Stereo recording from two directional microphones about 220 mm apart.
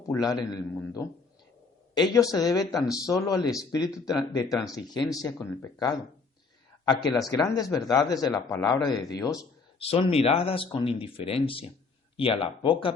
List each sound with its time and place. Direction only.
0.1 s a man's voice: 15° left (ahead or behind)
9.9 s speech: 25° left (ahead or behind)